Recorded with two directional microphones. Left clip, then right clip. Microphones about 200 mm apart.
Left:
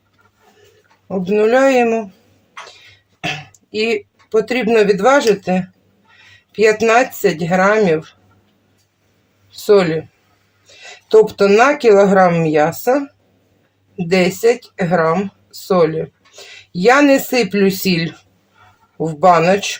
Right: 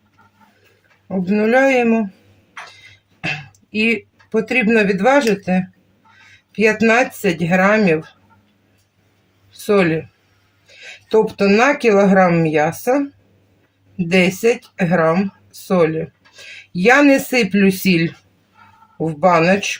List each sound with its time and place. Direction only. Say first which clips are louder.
1.0 s speech: left 4 dB; 30° left (ahead or behind)
3.7 s speech: even; 30° left (ahead or behind)
9.5 s speech: left 3 dB; 30° left (ahead or behind)
11.1 s speech: left 4 dB; 30° left (ahead or behind)
14.1 s speech: left 2 dB; 30° left (ahead or behind)